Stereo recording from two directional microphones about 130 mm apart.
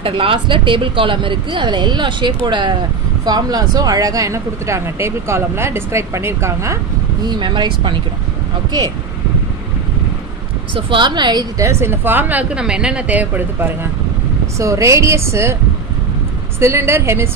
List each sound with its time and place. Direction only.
0.0 s speech: 45° right (ahead or behind); by 6.8 s 20° right (ahead or behind)
7.2 s speech: 35° right (ahead or behind)
10.7 s a woman's voice: 40° right (ahead or behind); by 15.5 s 20° right (ahead or behind)
16.5 s speech: 20° right (ahead or behind)